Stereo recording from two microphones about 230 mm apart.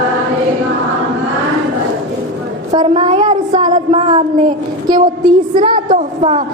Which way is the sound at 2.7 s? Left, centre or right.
Right.